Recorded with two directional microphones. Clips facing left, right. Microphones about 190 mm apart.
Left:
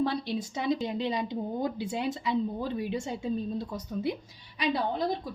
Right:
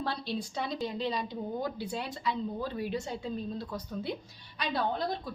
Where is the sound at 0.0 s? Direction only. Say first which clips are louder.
Left 5 dB; 15° left (ahead or behind).